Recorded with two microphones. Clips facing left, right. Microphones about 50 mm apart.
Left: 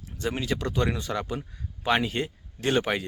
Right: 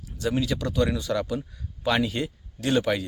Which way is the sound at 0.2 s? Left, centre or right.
Left.